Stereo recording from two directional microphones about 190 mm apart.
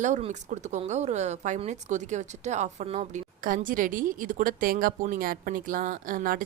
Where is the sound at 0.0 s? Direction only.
40° right (ahead or behind).